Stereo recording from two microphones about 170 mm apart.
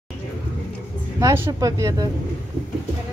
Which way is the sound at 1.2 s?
15° right (ahead or behind).